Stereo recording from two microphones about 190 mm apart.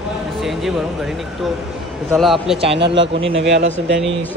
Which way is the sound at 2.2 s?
Centre (ahead or behind).